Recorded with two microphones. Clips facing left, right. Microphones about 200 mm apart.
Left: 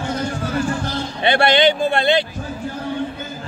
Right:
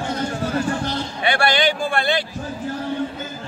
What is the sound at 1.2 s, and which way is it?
Speech, 25° left (ahead or behind).